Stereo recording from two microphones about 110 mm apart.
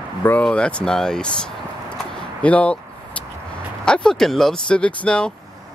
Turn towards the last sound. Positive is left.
turn(degrees=10)  # may be behind; listen again after turning